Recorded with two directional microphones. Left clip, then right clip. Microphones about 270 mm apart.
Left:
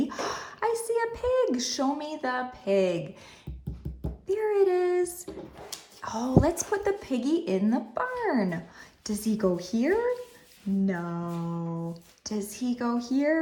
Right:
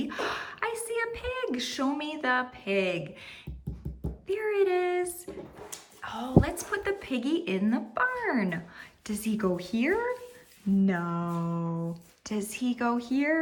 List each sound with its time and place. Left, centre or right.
0.1 s a sound: centre
4.3 s speech: centre
6.4 s speech: centre
11.5 s speech: centre